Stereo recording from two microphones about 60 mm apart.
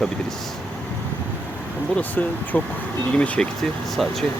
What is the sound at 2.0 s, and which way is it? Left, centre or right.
Speech, left.